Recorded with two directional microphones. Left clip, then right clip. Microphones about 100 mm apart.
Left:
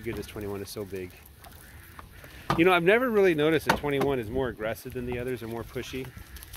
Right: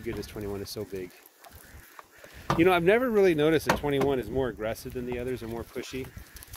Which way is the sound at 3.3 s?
45° right (ahead or behind).